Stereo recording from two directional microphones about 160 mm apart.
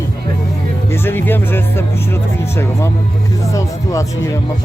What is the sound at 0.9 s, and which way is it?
Speech, 15° left (ahead or behind).